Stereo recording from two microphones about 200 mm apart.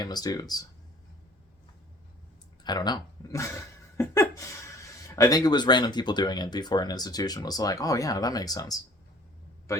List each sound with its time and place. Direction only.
0.0 s speech: 20° left (ahead or behind)
2.6 s a man's voice: 20° left (ahead or behind)